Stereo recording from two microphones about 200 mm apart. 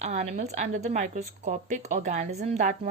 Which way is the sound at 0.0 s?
35° right (ahead or behind).